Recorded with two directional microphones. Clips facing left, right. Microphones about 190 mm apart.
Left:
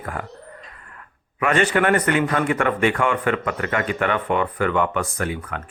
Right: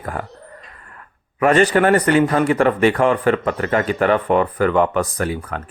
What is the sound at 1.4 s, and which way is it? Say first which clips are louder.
Speech: right 5 dB; 35° right (ahead or behind).